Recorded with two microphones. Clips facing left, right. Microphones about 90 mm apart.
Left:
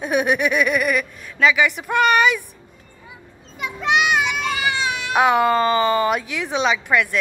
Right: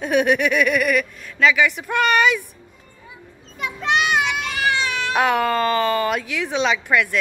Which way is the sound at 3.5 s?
5° left (ahead or behind).